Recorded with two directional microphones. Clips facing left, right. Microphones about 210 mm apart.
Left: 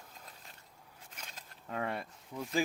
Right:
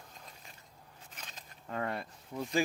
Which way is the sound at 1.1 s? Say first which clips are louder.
Even; 10° left (ahead or behind).